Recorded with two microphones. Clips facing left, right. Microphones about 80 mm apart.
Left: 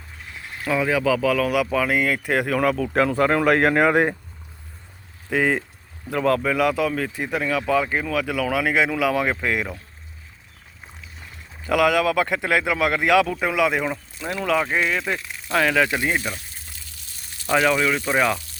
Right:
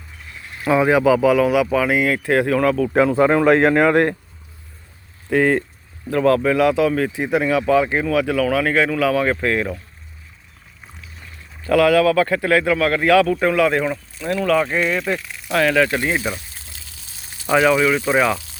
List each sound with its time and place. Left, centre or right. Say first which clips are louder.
0.6 s speech: right 6 dB; right
1.5 s speech: right 4 dB; centre
5.3 s speech: right 5 dB; centre
11.6 s speech: right 5 dB; centre
17.4 s speech: right 4 dB; centre